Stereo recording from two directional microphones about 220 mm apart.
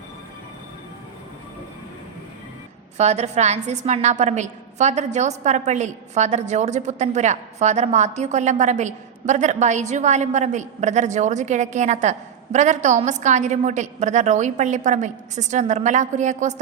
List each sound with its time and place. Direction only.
3.0 s a woman's voice: 30° right (ahead or behind)